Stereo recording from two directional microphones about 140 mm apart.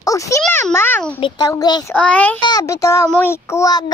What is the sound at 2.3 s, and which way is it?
A child's voice, 30° left (ahead or behind).